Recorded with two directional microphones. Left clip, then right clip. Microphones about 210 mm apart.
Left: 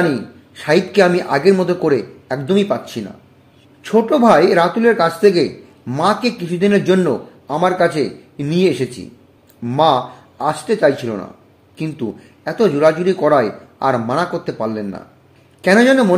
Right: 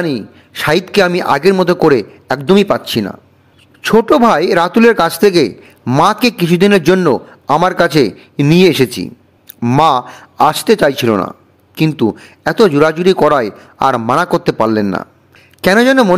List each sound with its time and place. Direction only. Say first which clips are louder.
0.0 s a man's voice: left 1 dB; 40° right (ahead or behind)